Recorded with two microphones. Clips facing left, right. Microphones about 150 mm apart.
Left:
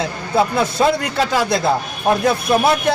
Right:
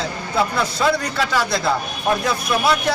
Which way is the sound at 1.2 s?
45° left (ahead or behind).